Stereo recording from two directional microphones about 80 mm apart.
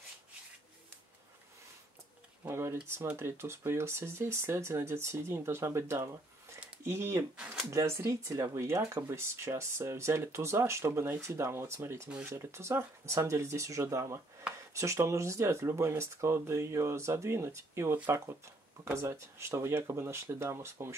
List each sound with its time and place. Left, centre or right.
2.4 s speech: right
18.9 s speech: right